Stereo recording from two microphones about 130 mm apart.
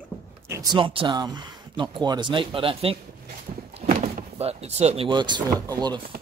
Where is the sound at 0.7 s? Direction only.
40° right (ahead or behind).